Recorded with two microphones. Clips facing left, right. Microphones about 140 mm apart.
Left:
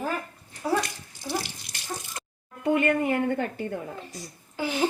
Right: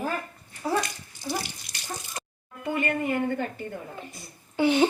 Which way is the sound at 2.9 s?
60° left (ahead or behind).